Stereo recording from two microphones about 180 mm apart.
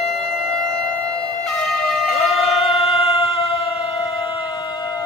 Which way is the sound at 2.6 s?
30° left (ahead or behind).